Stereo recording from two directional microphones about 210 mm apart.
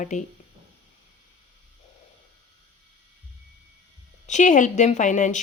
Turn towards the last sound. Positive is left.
turn(degrees=35)  # may be behind; listen again after turning